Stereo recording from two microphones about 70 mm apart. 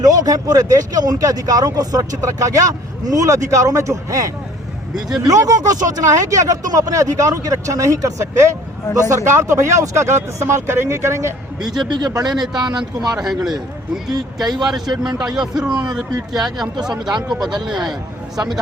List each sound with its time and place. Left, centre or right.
0.0 s speech: right
5.3 s speech: right
11.9 s speech: right
12.4 s speech: right
13.1 s a man's voice: centre
15.0 s a man's voice: centre
17.7 s a man's voice: centre
18.3 s speech: right